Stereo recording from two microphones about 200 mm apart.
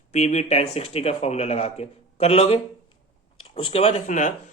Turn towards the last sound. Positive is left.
turn(degrees=40)  # may be behind; listen again after turning